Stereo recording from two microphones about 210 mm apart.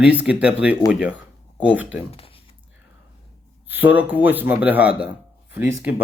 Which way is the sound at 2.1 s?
25° left (ahead or behind).